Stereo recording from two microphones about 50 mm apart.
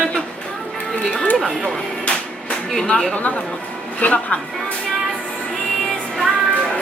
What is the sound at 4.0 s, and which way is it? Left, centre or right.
Speech, left.